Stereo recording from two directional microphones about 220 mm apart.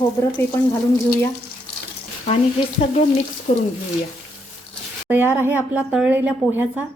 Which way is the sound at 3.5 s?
30° left (ahead or behind).